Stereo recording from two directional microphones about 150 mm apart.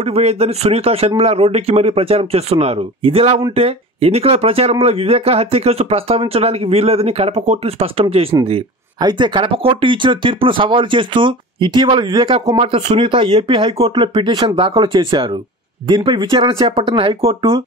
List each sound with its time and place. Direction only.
0.0 s speech: 40° right (ahead or behind)